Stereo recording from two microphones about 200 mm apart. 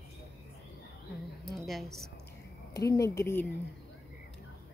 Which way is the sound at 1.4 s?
Centre (ahead or behind).